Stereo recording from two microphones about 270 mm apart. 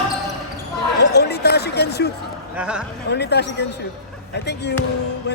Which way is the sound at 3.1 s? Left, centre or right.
Left.